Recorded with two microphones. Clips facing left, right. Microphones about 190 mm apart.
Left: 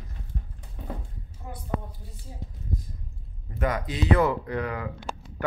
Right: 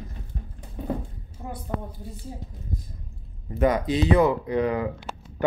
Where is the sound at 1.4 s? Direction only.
45° right (ahead or behind).